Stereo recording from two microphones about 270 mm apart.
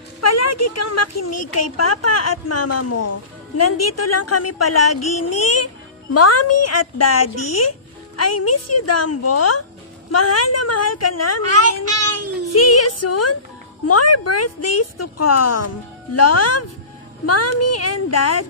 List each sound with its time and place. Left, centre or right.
0.2 s a woman's voice: left
12.5 s a woman's voice: left